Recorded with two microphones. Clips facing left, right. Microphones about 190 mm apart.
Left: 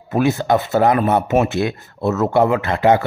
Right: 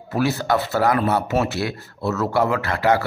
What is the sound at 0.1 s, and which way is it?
Speech, 20° left (ahead or behind).